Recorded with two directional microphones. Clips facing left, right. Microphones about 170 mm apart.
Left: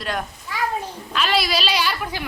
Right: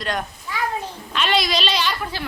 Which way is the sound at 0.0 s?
5° left (ahead or behind).